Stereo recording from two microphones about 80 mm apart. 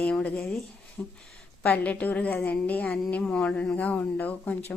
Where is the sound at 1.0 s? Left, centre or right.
Centre.